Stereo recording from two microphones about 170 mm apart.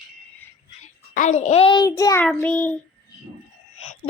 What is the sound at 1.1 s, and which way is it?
A child's voice, 45° left (ahead or behind).